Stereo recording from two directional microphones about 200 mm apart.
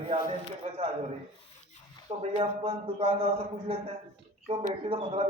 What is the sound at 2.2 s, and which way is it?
Speech, 30° right (ahead or behind).